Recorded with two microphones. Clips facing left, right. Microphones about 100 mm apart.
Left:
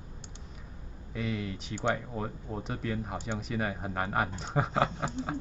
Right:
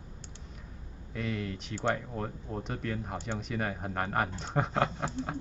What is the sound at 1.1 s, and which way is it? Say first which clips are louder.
Speech: left 1 dB; centre (ahead or behind).